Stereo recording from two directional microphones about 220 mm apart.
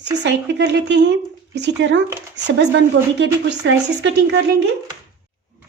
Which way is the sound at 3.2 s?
55° right (ahead or behind).